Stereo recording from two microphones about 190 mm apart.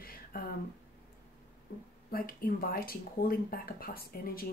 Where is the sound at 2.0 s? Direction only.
50° left (ahead or behind).